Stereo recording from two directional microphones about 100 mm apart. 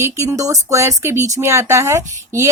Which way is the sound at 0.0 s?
30° right (ahead or behind).